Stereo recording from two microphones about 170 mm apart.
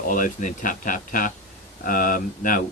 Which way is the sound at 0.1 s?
50° left (ahead or behind).